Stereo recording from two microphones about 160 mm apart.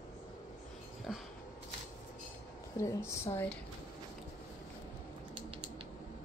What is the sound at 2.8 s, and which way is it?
Speech, 15° left (ahead or behind).